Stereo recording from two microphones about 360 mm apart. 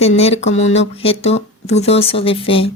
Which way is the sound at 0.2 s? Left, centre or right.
Centre.